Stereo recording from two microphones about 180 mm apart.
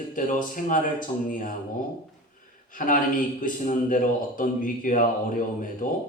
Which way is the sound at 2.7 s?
50° left (ahead or behind).